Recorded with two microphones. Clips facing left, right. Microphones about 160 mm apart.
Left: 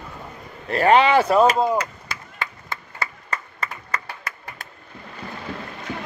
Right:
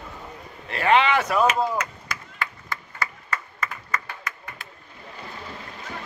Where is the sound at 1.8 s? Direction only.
30° left (ahead or behind).